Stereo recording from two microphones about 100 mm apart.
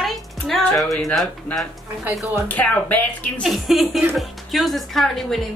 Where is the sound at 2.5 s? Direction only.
15° left (ahead or behind).